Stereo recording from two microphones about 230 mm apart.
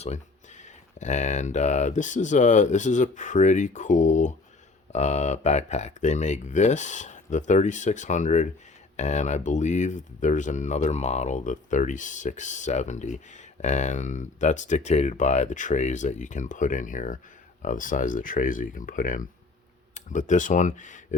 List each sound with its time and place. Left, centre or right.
0.0 s speech: left